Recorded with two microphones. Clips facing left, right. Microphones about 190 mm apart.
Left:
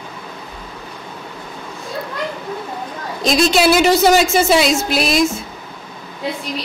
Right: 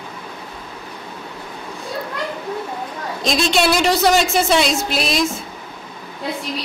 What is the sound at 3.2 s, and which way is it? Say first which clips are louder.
A woman's voice: left 4 dB; centre (ahead or behind).